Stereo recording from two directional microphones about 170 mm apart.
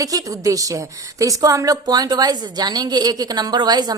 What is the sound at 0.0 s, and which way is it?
Speech, 20° right (ahead or behind).